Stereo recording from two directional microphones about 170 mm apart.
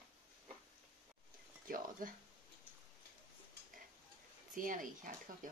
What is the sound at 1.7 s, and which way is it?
Speech, 55° right (ahead or behind).